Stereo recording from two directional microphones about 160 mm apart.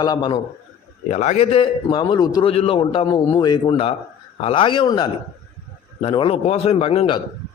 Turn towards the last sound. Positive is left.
turn(degrees=35)  # may be behind; listen again after turning